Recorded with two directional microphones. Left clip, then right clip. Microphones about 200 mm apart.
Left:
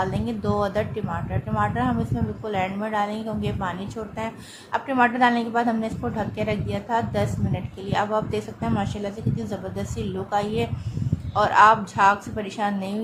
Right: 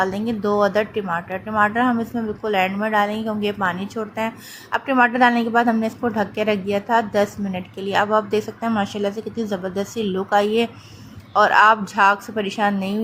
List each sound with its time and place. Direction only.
0.0 s a woman's voice: 20° right (ahead or behind)